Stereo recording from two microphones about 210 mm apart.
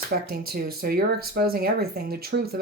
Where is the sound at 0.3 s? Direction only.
45° right (ahead or behind).